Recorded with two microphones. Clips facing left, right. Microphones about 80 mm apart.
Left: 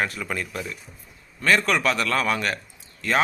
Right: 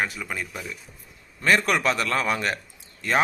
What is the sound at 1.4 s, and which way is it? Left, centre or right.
A man's voice, right.